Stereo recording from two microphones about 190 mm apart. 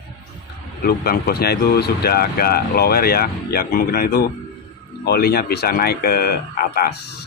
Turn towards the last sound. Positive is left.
turn(degrees=55)  # may be behind; listen again after turning